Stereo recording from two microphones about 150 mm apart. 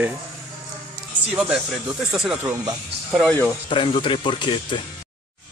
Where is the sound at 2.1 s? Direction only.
5° right (ahead or behind).